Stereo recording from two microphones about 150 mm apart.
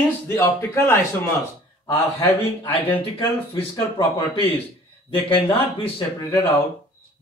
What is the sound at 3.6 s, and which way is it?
Speech, 35° left (ahead or behind).